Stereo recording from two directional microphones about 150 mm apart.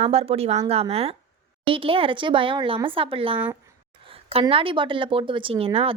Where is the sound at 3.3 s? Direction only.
10° right (ahead or behind).